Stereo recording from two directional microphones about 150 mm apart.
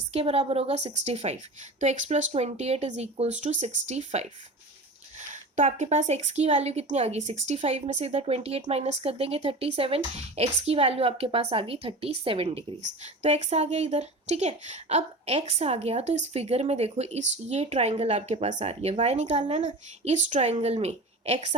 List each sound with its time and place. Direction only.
0.1 s speech: 45° right (ahead or behind)
5.3 s speech: 55° right (ahead or behind)